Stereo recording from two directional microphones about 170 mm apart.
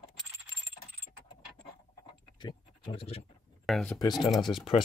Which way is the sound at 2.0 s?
25° left (ahead or behind).